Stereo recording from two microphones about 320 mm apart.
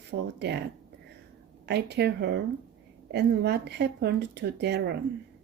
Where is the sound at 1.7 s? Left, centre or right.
Right.